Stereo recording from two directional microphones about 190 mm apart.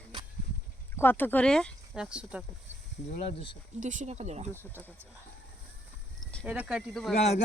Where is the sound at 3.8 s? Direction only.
40° right (ahead or behind).